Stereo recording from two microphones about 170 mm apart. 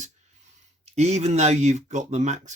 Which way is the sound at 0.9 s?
40° right (ahead or behind).